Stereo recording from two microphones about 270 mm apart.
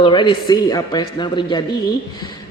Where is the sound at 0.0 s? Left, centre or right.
Centre.